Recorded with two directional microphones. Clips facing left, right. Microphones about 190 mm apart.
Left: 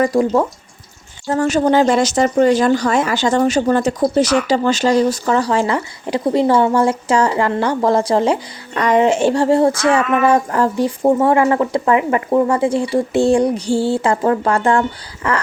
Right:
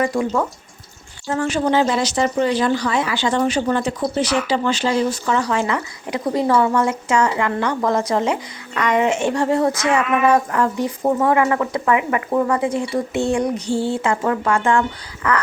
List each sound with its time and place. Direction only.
0.0 s speech: 35° left (ahead or behind)